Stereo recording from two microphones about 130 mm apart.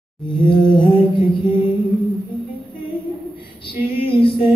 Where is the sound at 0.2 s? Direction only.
40° left (ahead or behind).